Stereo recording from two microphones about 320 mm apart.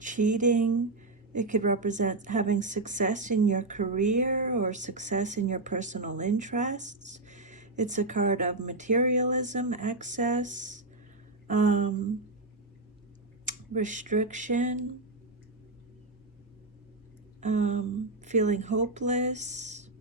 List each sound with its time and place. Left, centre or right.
0.0 s a woman's voice: right
13.4 s speech: right
17.4 s a woman's voice: right